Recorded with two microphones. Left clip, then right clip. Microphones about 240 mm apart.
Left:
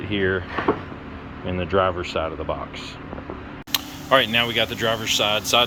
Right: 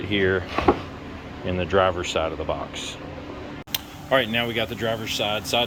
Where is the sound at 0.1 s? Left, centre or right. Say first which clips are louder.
Right 1 dB; centre.